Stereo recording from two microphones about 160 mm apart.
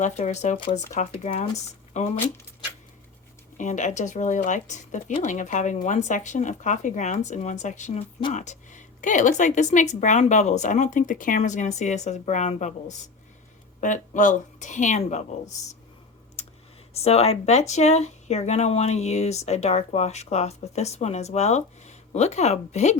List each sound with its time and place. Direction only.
0.0 s speech: 45° left (ahead or behind)
0.5 s speech: 30° left (ahead or behind)
0.9 s speech: 45° left (ahead or behind)
3.6 s speech: 50° left (ahead or behind)
16.4 s computer keyboard: 40° left (ahead or behind)
16.9 s speech: 40° left (ahead or behind)